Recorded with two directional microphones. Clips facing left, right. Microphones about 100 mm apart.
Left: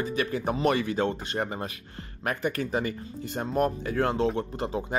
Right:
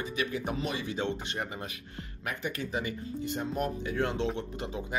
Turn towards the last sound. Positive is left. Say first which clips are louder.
# left 5 dB
turn(degrees=40)  # may be behind; listen again after turning